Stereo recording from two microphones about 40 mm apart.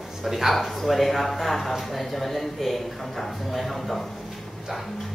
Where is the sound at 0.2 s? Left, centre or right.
Centre.